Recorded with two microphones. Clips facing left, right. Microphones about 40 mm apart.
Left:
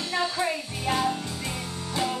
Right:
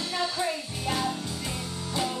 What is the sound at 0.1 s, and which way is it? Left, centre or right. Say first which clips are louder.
Music: left 3 dB; centre.